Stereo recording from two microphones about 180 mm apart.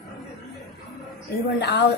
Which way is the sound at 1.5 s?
65° left (ahead or behind).